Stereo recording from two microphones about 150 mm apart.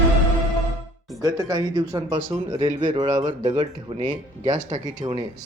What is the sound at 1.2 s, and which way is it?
Speech, 25° right (ahead or behind).